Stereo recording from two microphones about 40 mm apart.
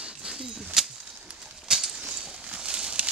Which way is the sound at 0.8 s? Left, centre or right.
Centre.